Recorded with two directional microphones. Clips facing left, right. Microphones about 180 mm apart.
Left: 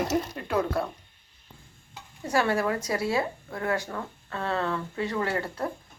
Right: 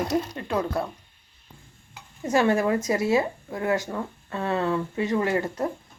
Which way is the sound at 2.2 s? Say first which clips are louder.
Right 4 dB; 25° right (ahead or behind).